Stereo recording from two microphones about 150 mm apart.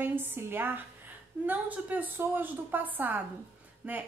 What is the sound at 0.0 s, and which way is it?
A woman's voice, 15° right (ahead or behind).